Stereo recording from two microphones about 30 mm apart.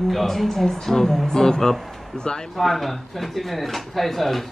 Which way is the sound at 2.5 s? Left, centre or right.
Centre.